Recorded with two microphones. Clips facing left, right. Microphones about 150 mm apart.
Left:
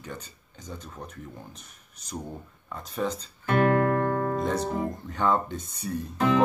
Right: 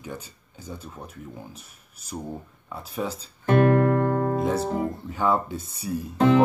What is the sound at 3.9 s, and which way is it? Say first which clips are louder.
Music: right 3 dB; 30° right (ahead or behind).